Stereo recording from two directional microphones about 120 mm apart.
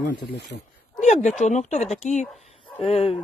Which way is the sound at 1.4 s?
80° left.